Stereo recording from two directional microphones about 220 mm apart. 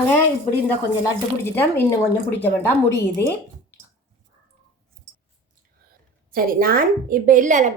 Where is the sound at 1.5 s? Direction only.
10° left (ahead or behind).